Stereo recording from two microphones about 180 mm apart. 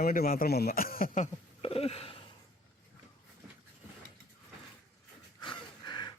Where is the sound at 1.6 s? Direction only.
30° left (ahead or behind).